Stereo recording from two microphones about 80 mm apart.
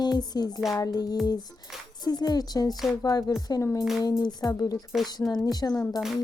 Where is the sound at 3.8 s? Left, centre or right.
Centre.